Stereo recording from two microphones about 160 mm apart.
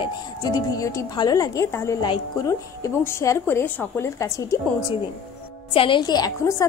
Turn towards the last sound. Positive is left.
turn(degrees=20)  # may be behind; listen again after turning